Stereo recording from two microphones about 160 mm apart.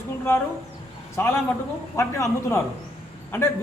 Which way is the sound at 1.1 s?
15° left (ahead or behind).